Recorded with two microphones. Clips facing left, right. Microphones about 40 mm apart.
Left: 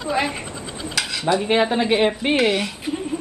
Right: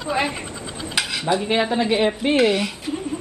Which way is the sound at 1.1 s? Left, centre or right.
Centre.